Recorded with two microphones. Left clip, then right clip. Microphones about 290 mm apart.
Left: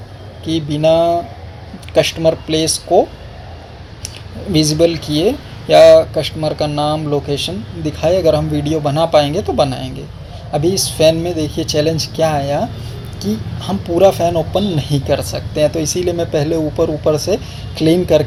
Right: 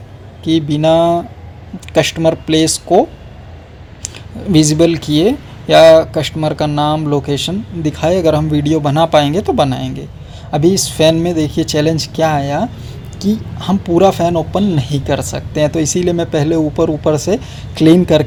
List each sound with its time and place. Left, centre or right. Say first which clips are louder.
0.4 s speech: right 2 dB; right
4.5 s speech: right 2 dB; right